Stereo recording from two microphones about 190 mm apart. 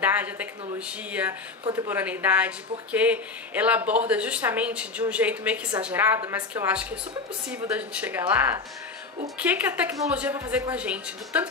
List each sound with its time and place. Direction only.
0.0 s speech: 10° right (ahead or behind)
1.6 s speech: 20° right (ahead or behind)
1.9 s speech: 10° right (ahead or behind)
9.4 s speech: 10° right (ahead or behind)